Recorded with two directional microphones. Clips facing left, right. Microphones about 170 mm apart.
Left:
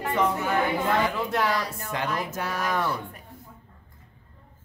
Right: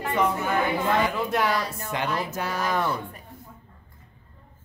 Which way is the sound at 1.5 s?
25° right (ahead or behind).